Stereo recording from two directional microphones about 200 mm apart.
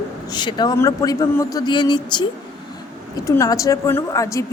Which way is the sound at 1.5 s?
20° left (ahead or behind).